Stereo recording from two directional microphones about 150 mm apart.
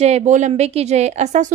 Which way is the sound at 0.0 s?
50° right (ahead or behind).